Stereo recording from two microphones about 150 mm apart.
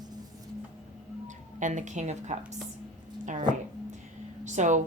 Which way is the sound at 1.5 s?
55° right (ahead or behind).